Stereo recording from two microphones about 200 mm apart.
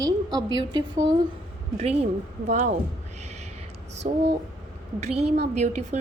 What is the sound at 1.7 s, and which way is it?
A woman's voice, 30° right (ahead or behind).